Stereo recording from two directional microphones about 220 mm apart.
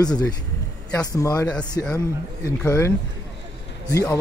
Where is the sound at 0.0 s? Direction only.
15° left (ahead or behind).